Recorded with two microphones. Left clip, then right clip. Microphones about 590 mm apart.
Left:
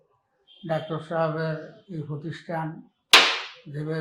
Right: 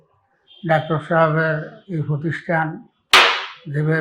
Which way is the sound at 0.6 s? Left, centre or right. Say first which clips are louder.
Right 10 dB; right.